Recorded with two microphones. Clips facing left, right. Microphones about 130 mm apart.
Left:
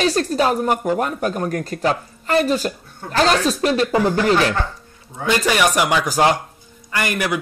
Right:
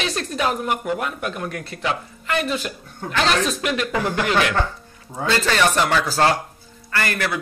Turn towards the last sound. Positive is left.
turn(degrees=15)  # may be behind; listen again after turning